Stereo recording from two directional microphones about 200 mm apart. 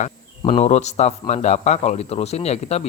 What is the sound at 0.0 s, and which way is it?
Speech, 30° left (ahead or behind).